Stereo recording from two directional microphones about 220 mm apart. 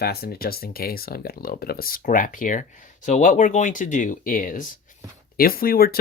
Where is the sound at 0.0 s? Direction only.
45° left (ahead or behind).